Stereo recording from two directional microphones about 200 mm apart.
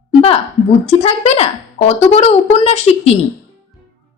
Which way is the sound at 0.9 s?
30° left (ahead or behind).